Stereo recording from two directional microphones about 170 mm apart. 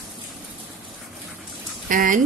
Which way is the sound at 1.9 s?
55° right (ahead or behind).